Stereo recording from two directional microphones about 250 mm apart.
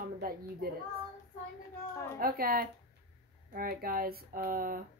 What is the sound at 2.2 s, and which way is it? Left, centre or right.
Speech, right.